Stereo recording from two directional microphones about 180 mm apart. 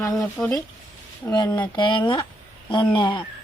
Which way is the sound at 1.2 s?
20° left (ahead or behind).